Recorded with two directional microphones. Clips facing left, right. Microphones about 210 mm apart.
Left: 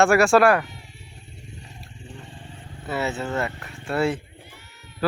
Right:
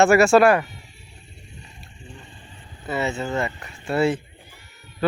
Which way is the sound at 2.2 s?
80° left.